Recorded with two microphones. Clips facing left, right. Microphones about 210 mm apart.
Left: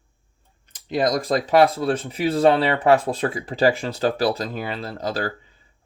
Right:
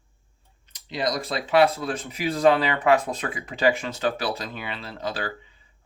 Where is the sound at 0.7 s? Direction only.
50° left (ahead or behind).